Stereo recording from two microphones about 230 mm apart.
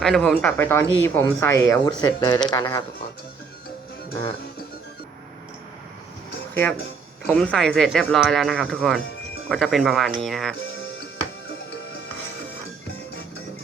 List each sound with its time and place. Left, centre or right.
0.0 s speech: centre
6.5 s speech: centre